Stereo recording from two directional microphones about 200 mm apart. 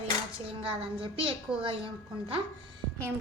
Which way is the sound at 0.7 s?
25° right (ahead or behind).